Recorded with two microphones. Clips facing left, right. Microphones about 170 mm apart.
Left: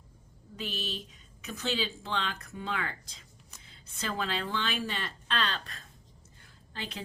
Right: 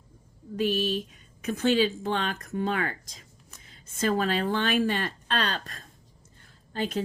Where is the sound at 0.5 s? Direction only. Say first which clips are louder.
Right 12 dB; 50° right (ahead or behind).